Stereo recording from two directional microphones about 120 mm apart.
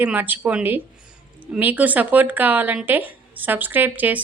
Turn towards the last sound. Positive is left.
turn(degrees=-15)  # may be behind; listen again after turning